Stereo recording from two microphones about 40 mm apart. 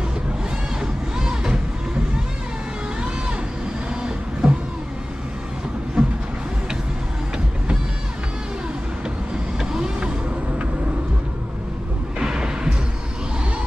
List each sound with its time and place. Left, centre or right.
0.7 s music: centre
3.9 s vehicle: right
6.0 s vehicle: centre
9.6 s vehicle: centre
12.2 s a sound: centre